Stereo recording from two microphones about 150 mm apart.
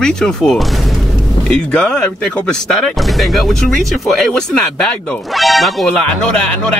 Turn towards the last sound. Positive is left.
turn(degrees=0)  # may be behind; listen again after turning